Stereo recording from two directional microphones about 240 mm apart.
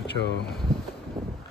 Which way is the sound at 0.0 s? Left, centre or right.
Left.